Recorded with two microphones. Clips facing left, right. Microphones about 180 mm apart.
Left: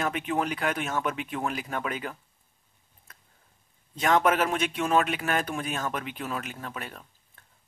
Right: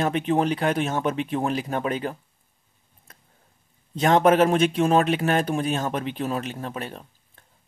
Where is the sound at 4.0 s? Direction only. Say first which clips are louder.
Right 6 dB; 30° right (ahead or behind).